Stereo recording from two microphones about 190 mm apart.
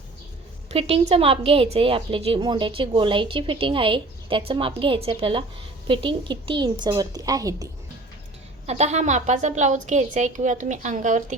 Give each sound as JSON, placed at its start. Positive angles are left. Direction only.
{"t": 0.7, "sound": "a woman's voice", "side_deg": -30}
{"t": 8.6, "sound": "a woman's voice", "side_deg": -35}